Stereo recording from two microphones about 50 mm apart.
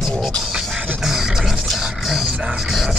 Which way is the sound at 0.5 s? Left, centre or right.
Centre.